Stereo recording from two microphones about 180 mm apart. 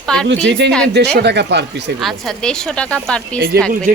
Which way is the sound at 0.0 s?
5° left (ahead or behind).